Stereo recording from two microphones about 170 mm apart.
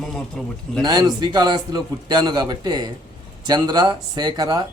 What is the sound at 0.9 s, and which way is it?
A man's voice, 20° right (ahead or behind).